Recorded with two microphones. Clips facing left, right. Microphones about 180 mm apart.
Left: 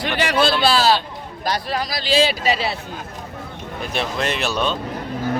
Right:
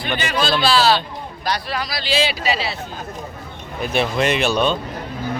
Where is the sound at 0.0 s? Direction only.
75° left (ahead or behind).